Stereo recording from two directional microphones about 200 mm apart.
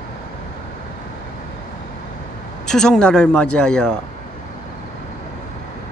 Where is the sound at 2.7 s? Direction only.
5° left (ahead or behind).